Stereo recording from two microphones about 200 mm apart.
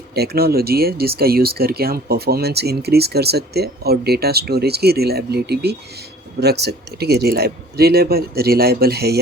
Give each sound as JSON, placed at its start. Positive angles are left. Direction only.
{"t": 0.1, "sound": "speech", "side_deg": -50}